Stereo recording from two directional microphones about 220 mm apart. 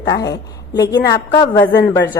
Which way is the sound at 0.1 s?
15° left (ahead or behind).